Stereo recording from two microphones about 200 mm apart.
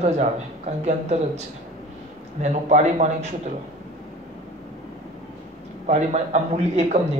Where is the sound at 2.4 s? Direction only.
35° right (ahead or behind).